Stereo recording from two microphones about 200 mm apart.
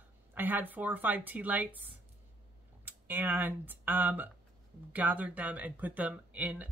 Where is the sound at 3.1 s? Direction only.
10° right (ahead or behind).